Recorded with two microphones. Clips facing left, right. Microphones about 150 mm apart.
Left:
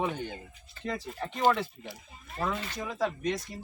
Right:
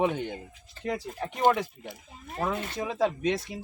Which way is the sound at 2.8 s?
25° right (ahead or behind).